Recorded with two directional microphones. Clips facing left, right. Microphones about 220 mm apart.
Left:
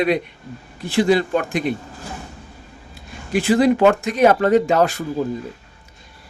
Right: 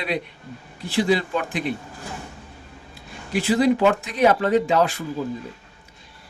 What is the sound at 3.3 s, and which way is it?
A man's voice, 50° left (ahead or behind).